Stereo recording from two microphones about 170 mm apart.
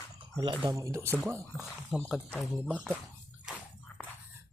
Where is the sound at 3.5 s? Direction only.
5° right (ahead or behind).